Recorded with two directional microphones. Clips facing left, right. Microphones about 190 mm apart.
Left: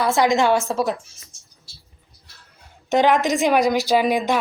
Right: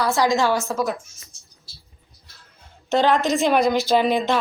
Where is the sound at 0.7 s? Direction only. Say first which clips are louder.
Left 2 dB; 30° left (ahead or behind).